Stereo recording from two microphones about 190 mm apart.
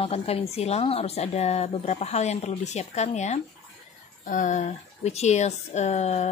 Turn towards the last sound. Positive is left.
turn(degrees=35)  # may be behind; listen again after turning